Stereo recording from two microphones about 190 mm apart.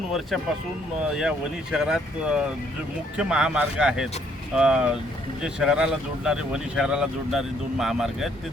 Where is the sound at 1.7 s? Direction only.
5° right (ahead or behind).